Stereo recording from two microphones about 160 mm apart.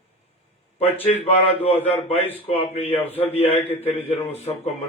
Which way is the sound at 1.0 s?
40° left (ahead or behind).